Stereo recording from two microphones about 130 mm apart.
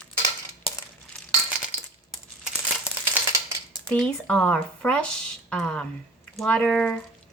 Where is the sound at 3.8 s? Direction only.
10° left (ahead or behind).